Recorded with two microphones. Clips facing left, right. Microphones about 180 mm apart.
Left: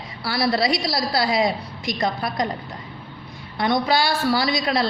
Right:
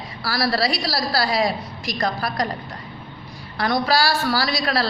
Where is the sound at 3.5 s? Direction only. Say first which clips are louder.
Even; 20° left (ahead or behind).